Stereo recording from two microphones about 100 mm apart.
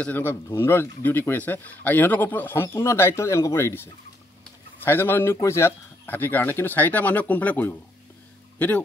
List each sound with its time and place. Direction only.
0.0 s speech: 20° left (ahead or behind)